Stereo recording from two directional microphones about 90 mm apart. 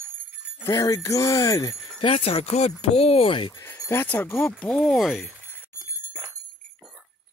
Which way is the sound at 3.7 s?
35° left (ahead or behind).